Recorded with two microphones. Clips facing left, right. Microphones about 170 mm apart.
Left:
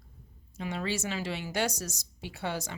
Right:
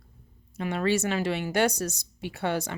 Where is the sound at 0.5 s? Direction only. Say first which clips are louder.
Right 7 dB; 60° right (ahead or behind).